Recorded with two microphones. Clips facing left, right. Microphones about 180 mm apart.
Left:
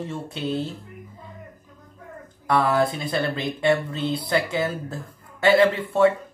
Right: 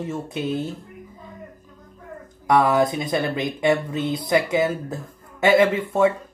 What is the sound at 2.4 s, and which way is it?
Speech, 20° right (ahead or behind).